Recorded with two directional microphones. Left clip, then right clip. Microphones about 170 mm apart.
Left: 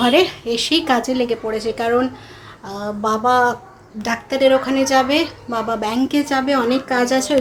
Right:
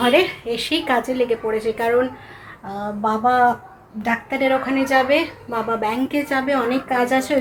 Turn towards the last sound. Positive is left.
turn(degrees=20)  # may be behind; listen again after turning